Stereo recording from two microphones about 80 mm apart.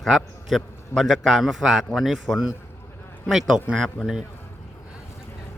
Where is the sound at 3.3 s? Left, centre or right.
Centre.